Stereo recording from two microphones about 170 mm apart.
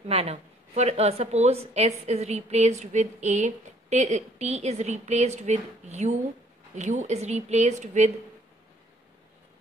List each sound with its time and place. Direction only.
0.1 s a woman's voice: 35° right (ahead or behind)